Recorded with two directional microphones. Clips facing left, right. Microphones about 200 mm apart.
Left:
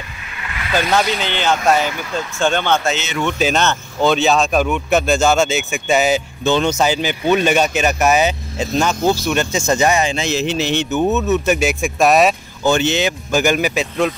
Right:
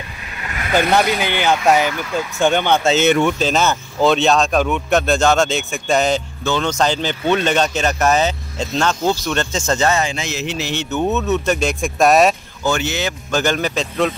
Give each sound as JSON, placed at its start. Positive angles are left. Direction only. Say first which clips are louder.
{"t": 0.5, "sound": "vehicle", "louder": "right 2 dB", "side_deg": -45}
{"t": 1.2, "sound": "speech", "louder": "right 1 dB", "side_deg": -10}
{"t": 3.5, "sound": "speech", "louder": "right 1 dB", "side_deg": 0}
{"t": 6.4, "sound": "speech", "louder": "left 5 dB", "side_deg": 20}
{"t": 6.7, "sound": "speech", "louder": "left 1 dB", "side_deg": 10}
{"t": 10.1, "sound": "speech", "louder": "left 5 dB", "side_deg": 30}
{"t": 10.9, "sound": "speech", "louder": "even", "side_deg": 5}
{"t": 12.6, "sound": "speech", "louder": "left 4 dB", "side_deg": 20}
{"t": 13.3, "sound": "speech", "louder": "left 2 dB", "side_deg": 10}